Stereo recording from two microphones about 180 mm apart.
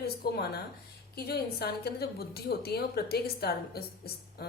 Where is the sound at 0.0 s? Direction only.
60° left (ahead or behind).